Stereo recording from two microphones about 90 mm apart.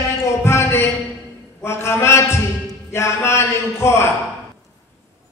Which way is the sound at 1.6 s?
30° left (ahead or behind).